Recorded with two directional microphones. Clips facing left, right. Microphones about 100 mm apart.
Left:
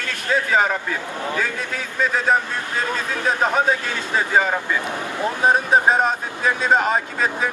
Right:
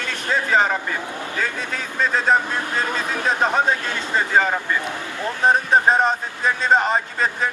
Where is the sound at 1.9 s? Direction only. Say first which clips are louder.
Even; 5° left (ahead or behind).